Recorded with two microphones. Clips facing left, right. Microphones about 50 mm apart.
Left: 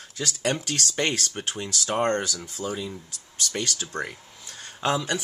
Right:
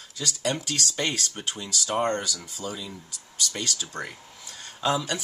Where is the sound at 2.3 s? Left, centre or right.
Left.